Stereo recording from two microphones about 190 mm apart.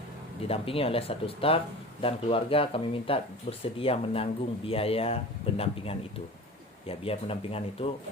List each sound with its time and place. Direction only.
0.4 s speech: 30° left (ahead or behind)